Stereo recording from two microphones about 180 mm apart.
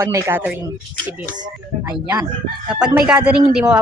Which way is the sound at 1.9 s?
5° right (ahead or behind).